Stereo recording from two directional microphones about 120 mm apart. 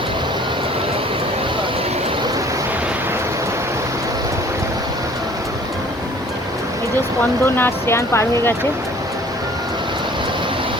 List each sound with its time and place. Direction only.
7.2 s speech: 20° left (ahead or behind)